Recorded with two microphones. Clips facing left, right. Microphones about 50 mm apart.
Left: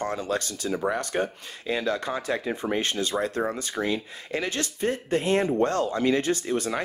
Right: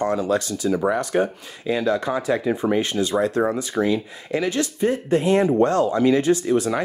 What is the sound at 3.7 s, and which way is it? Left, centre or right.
Speech, right.